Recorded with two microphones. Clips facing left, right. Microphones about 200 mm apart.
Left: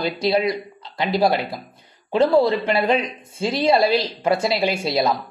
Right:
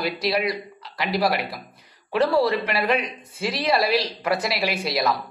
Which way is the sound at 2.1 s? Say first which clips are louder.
Left 4 dB; 20° left (ahead or behind).